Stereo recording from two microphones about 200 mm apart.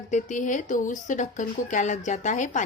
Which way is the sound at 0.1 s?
40° left (ahead or behind).